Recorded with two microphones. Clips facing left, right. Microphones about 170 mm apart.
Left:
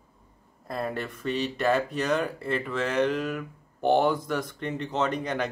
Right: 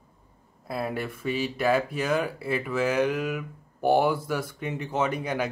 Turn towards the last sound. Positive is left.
turn(degrees=-10)  # may be behind; listen again after turning